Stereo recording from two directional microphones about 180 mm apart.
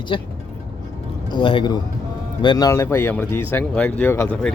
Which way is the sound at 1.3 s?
30° left (ahead or behind).